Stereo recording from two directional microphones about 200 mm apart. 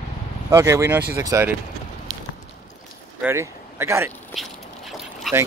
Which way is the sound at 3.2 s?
10° right (ahead or behind).